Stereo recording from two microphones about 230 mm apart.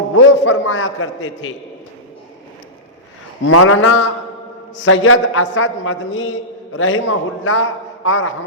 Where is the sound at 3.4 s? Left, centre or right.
Left.